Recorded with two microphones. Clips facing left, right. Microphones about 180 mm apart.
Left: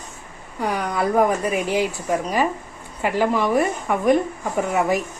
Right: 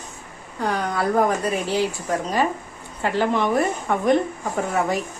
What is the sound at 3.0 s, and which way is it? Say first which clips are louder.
Speech: left 1 dB; 10° left (ahead or behind).